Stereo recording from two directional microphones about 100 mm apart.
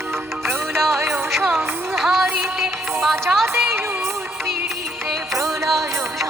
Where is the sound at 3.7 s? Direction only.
25° right (ahead or behind).